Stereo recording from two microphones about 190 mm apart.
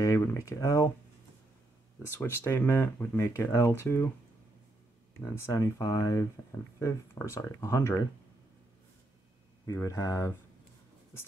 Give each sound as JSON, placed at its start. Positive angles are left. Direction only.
{"t": 0.0, "sound": "speech", "side_deg": 15}
{"t": 2.0, "sound": "speech", "side_deg": 10}
{"t": 5.3, "sound": "speech", "side_deg": 15}
{"t": 9.7, "sound": "speech", "side_deg": 15}